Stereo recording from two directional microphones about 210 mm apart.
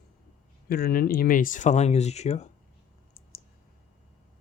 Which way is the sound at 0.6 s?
45° left (ahead or behind).